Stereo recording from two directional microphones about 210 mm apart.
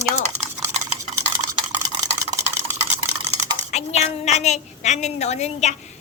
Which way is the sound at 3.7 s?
30° left (ahead or behind).